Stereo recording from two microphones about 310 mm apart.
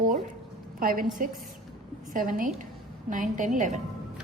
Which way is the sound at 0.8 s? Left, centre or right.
Right.